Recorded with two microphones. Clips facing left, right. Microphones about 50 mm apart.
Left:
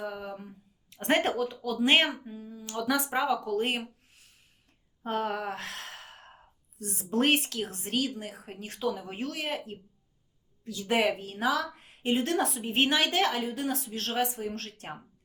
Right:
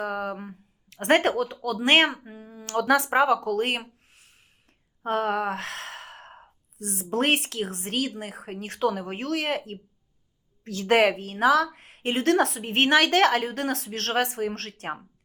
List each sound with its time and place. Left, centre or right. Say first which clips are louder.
0.0 s speech: right 7 dB; right
2.0 s a sound: right 3 dB; right
2.8 s speech: right 7 dB; right
3.8 s a sound: even; right
5.0 s speech: right 6 dB; right
10.6 s speech: right 7 dB; right